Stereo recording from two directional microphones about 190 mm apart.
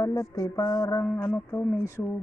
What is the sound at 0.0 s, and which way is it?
Speech, 15° left (ahead or behind).